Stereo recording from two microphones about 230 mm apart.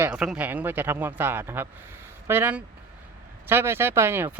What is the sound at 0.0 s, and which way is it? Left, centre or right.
Speech, centre.